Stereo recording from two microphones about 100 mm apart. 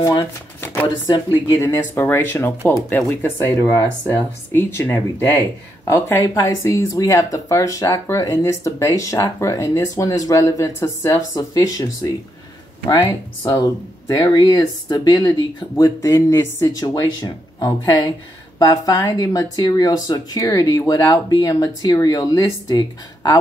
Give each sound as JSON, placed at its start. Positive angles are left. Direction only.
{"t": 0.0, "sound": "speech", "side_deg": 40}
{"t": 0.6, "sound": "shuffling cards", "side_deg": 20}
{"t": 1.0, "sound": "speech", "side_deg": 40}
{"t": 1.6, "sound": "speech", "side_deg": 25}
{"t": 6.2, "sound": "speech", "side_deg": 35}